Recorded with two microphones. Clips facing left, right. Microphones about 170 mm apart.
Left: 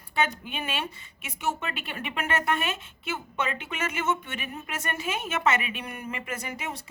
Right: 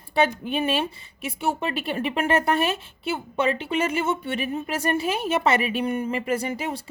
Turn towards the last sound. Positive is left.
turn(degrees=-30)  # may be behind; listen again after turning